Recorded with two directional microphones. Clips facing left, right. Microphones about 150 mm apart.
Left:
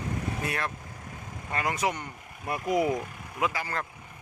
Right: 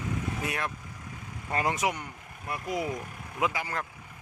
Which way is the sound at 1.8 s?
10° right (ahead or behind).